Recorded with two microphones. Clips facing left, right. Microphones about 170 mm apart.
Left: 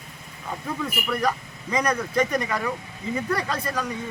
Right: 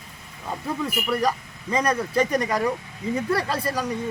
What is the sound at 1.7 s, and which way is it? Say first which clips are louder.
Speech: right 1 dB; 30° right (ahead or behind).